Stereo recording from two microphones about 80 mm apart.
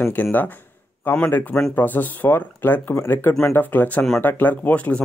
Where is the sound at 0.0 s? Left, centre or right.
Left.